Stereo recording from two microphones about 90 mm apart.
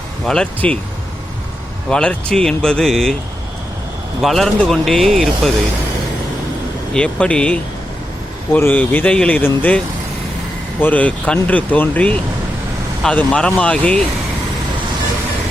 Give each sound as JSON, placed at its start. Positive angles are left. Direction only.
{"t": 0.6, "sound": "speech", "side_deg": 10}
{"t": 1.9, "sound": "speech", "side_deg": 10}
{"t": 4.2, "sound": "speech", "side_deg": 0}
{"t": 6.9, "sound": "speech", "side_deg": 10}
{"t": 8.5, "sound": "speech", "side_deg": 20}
{"t": 13.1, "sound": "speech", "side_deg": 10}